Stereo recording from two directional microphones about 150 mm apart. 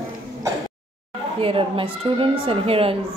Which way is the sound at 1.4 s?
40° right (ahead or behind).